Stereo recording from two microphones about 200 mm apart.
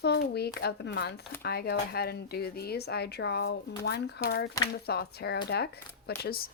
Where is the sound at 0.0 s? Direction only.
55° left (ahead or behind).